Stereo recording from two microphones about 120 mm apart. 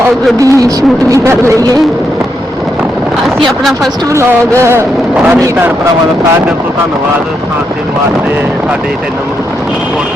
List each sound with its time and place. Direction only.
0.3 s speech: 30° right (ahead or behind)
4.1 s speech: 25° right (ahead or behind)